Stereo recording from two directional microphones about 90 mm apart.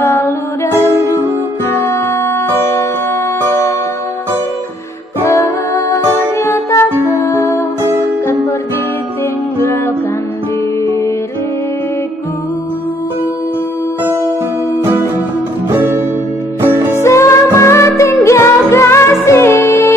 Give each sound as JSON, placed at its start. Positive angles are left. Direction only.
{"t": 0.0, "sound": "music", "side_deg": 25}
{"t": 5.2, "sound": "music", "side_deg": 35}
{"t": 9.6, "sound": "music", "side_deg": 30}
{"t": 16.6, "sound": "music", "side_deg": -25}
{"t": 17.0, "sound": "music", "side_deg": 35}